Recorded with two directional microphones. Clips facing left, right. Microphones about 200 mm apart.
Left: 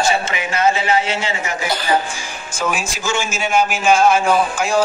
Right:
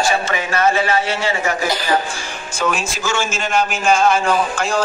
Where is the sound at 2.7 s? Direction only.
10° left (ahead or behind).